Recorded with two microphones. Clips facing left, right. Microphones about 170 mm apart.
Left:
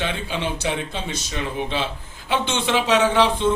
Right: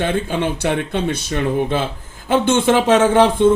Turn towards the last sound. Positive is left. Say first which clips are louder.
# right 5 dB
turn(degrees=-50)  # may be behind; listen again after turning